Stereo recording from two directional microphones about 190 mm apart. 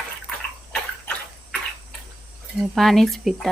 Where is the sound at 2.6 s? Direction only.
Centre (ahead or behind).